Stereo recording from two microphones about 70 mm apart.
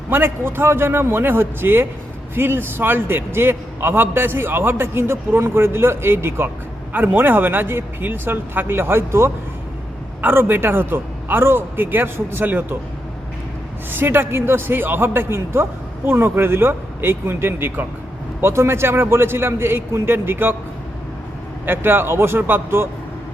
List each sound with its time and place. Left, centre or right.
0.1 s a man's voice: right
10.2 s a man's voice: right
13.9 s a man's voice: right
21.7 s a man's voice: right